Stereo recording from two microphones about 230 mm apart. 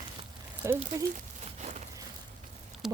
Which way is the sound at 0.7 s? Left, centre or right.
Right.